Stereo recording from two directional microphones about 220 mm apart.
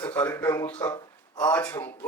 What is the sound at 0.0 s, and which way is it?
Speech, 10° left (ahead or behind).